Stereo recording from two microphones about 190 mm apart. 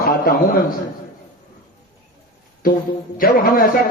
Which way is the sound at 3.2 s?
50° left (ahead or behind).